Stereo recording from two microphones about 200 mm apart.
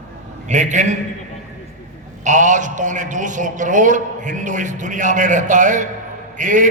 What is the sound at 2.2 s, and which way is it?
A man's voice, 40° right (ahead or behind).